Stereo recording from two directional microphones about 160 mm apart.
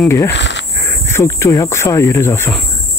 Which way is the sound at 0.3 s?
90° left.